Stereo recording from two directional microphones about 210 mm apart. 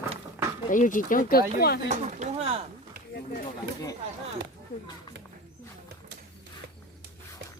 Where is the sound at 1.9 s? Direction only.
35° right (ahead or behind).